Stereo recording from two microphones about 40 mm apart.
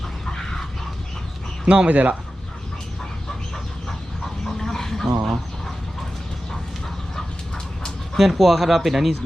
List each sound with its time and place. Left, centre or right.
1.6 s speech: right
4.4 s duck: centre
5.2 s a sound: centre
8.2 s speech: centre